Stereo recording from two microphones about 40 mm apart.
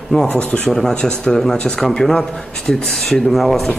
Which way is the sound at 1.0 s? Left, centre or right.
Left.